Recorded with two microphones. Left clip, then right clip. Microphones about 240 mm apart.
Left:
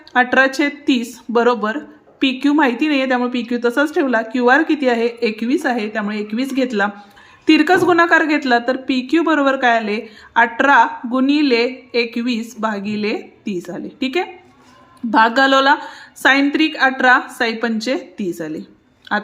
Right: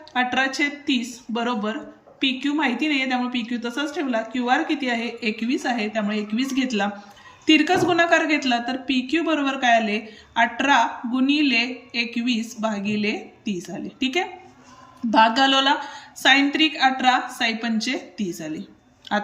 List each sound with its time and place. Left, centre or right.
0.1 s a woman's voice: left